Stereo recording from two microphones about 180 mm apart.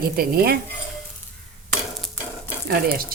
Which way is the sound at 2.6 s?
55° right (ahead or behind).